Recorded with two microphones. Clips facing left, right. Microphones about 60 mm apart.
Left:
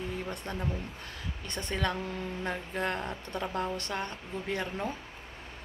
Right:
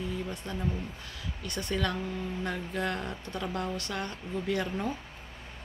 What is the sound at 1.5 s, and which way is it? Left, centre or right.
Speech, left.